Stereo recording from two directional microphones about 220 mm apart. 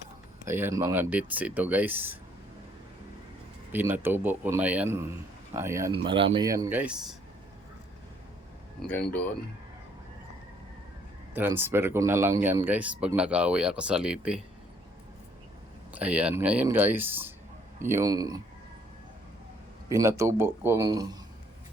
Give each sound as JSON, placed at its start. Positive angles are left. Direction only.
{"t": 0.4, "sound": "speech", "side_deg": -10}
{"t": 3.7, "sound": "speech", "side_deg": -10}
{"t": 6.1, "sound": "speech", "side_deg": -25}
{"t": 8.8, "sound": "speech", "side_deg": 5}
{"t": 11.3, "sound": "speech", "side_deg": -10}
{"t": 15.9, "sound": "speech", "side_deg": -5}
{"t": 19.9, "sound": "speech", "side_deg": -15}